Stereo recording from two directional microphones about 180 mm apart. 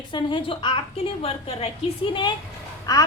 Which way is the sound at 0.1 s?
25° left (ahead or behind).